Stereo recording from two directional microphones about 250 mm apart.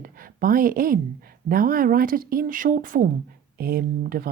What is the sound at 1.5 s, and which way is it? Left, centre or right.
Speech, right.